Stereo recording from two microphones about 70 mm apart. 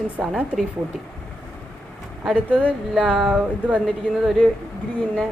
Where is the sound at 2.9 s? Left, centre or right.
Centre.